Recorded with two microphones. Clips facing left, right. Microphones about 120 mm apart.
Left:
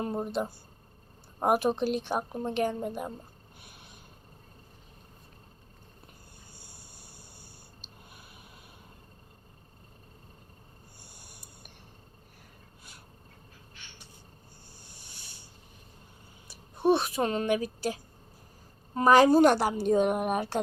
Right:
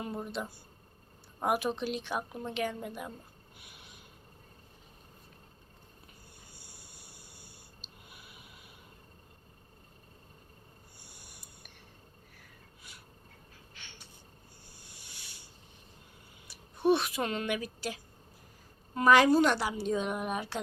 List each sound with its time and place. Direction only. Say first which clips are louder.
0.0 s a woman's voice: left 6 dB; 40° left (ahead or behind)
15.0 s a sound: left 1 dB; 35° left (ahead or behind)
16.5 s a woman's voice: left 2 dB; 40° left (ahead or behind)